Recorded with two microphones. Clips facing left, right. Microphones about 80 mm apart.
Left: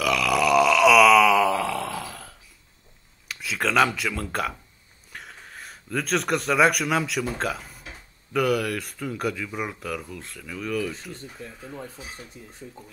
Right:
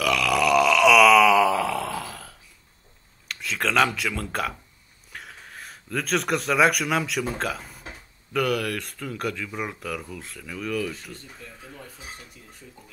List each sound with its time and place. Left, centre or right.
0.0 s grunt: centre
3.3 s speech: centre
12.2 s speech: left